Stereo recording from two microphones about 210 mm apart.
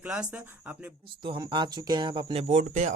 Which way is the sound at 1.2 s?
20° right (ahead or behind).